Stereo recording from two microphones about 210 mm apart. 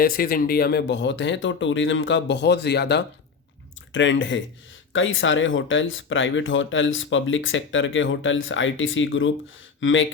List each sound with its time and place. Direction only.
0.0 s speech: 45° left (ahead or behind)
3.9 s speech: 60° left (ahead or behind)